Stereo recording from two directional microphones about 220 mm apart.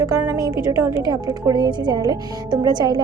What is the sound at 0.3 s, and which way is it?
A woman's voice, 15° right (ahead or behind).